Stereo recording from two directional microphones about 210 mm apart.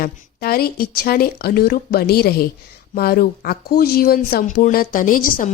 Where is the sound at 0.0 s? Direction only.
45° left (ahead or behind).